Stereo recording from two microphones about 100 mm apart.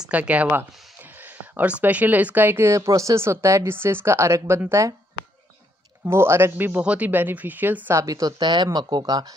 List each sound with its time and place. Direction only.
0.0 s speech: 15° right (ahead or behind); by 4.9 s 30° right (ahead or behind)
6.0 s speech: 25° right (ahead or behind)
8.0 s speech: 35° right (ahead or behind)